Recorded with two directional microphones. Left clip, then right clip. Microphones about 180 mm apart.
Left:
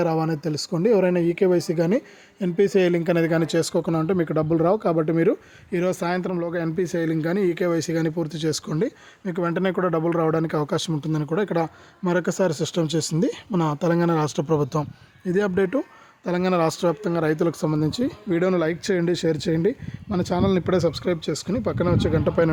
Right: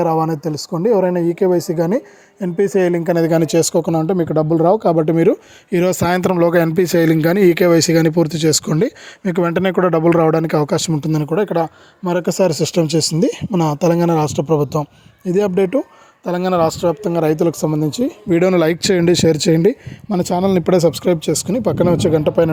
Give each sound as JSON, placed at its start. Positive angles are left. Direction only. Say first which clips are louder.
{"t": 0.0, "sound": "speech", "louder": "right 7 dB", "side_deg": -20}
{"t": 11.3, "sound": "speech", "louder": "right 6 dB", "side_deg": -20}
{"t": 17.0, "sound": "speech", "louder": "right 7 dB", "side_deg": -30}
{"t": 18.3, "sound": "speech", "louder": "right 9 dB", "side_deg": -40}